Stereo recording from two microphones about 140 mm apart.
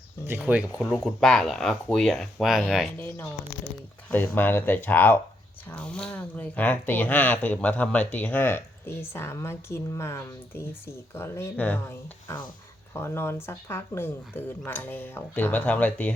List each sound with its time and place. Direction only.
0.3 s speech: 10° right (ahead or behind)
0.9 s speech: centre (ahead or behind)
4.1 s speech: 15° left (ahead or behind)